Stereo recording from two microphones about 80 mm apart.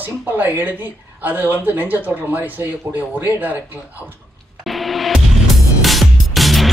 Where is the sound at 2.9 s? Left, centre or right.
Right.